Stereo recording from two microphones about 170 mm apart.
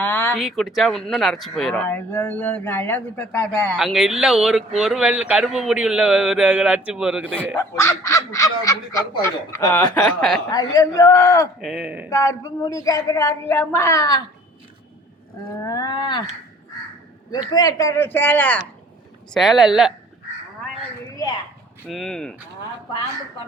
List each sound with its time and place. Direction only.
0.0 s a sound: 10° left (ahead or behind)
0.3 s speech: centre (ahead or behind)
3.8 s a man's voice: 5° right (ahead or behind)
7.5 s speech: 15° left (ahead or behind)
10.2 s a man's voice: 5° left (ahead or behind)
10.5 s speech: 20° left (ahead or behind)
11.6 s a man's voice: 5° right (ahead or behind)
12.1 s speech: 20° left (ahead or behind)
15.6 s speech: 20° left (ahead or behind)
17.5 s speech: 20° left (ahead or behind)
19.3 s a man's voice: centre (ahead or behind)
21.8 s a man's voice: centre (ahead or behind)